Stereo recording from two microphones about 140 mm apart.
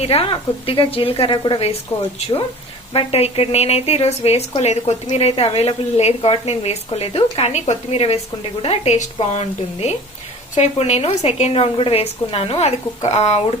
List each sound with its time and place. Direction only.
0.0 s a woman's voice: 45° left (ahead or behind)
2.9 s speech: 45° left (ahead or behind)